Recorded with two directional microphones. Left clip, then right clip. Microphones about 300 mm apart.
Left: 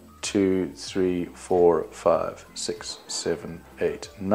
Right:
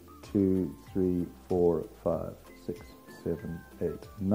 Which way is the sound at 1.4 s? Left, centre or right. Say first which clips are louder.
Left 8 dB; left.